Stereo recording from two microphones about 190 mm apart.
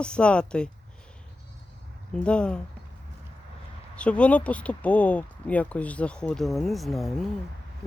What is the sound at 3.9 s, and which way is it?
Speech, 5° left (ahead or behind).